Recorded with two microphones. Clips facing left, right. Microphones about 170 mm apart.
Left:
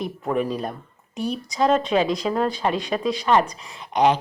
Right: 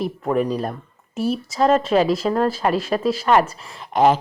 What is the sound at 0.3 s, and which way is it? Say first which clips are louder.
Speech: right 3 dB; centre (ahead or behind).